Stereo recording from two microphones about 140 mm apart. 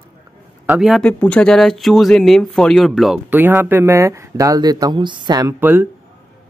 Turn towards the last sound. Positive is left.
turn(degrees=-15)  # may be behind; listen again after turning